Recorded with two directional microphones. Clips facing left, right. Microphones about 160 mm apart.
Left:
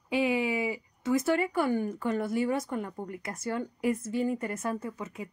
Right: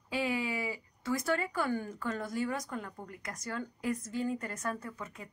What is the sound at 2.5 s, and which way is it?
Speech, 25° left (ahead or behind).